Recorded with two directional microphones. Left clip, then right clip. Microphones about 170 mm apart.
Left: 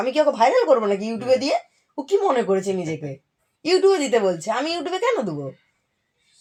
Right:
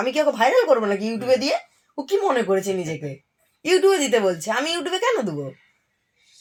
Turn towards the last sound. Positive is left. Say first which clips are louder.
# even
turn(degrees=-5)  # may be behind; listen again after turning